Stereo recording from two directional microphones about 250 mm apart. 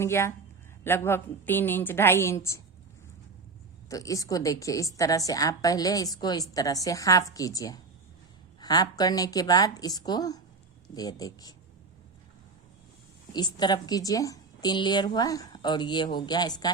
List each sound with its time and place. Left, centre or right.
0.0 s a woman's voice: centre
3.8 s a woman's voice: centre
13.3 s a woman's voice: centre